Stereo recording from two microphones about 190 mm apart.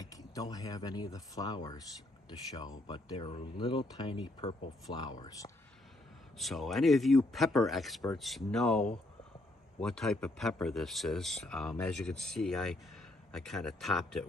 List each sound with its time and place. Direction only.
0.0 s speech: 20° left (ahead or behind)
6.3 s speech: centre (ahead or behind)